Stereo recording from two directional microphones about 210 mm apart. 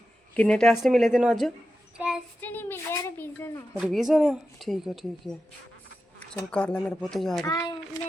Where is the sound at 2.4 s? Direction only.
10° left (ahead or behind).